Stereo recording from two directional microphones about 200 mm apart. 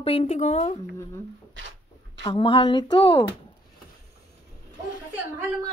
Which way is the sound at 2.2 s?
25° left (ahead or behind).